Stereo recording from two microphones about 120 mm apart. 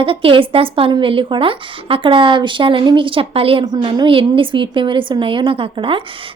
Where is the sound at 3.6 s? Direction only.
35° right (ahead or behind).